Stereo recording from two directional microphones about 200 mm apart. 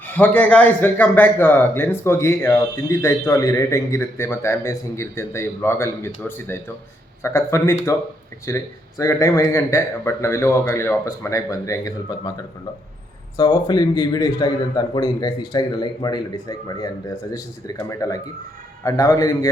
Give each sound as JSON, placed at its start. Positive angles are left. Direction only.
{"t": 0.2, "sound": "a man's voice", "side_deg": 5}